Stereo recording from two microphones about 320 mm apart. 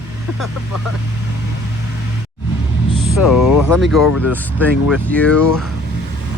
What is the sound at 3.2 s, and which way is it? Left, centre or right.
Speech, left.